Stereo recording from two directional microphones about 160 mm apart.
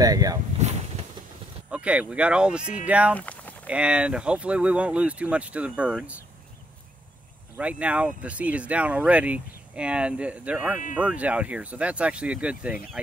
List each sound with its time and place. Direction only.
0.0 s speech: 25° right (ahead or behind)
1.7 s speech: 5° right (ahead or behind)
3.2 s a sound: 10° left (ahead or behind)
3.6 s speech: 5° right (ahead or behind)
7.5 s speech: 10° right (ahead or behind)